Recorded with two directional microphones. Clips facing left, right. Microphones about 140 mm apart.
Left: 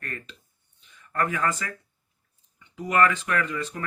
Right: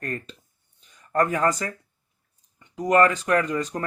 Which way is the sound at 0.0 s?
35° right (ahead or behind).